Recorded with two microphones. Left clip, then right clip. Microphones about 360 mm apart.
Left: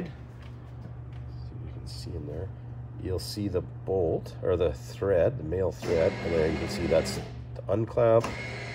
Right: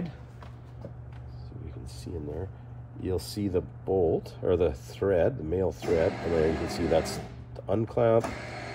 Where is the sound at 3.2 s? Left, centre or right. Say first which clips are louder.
Right 1 dB; centre.